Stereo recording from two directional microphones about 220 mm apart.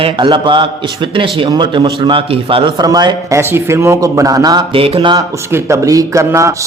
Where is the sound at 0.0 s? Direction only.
20° right (ahead or behind).